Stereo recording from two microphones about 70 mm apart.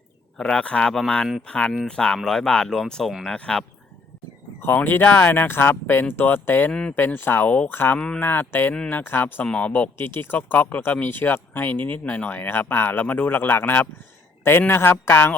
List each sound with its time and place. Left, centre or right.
0.3 s speech: centre
3.3 s speech: centre
4.6 s speech: left
6.7 s speech: centre
6.9 s speech: left
7.7 s speech: left
7.9 s speech: centre
8.2 s speech: left
10.0 s speech: left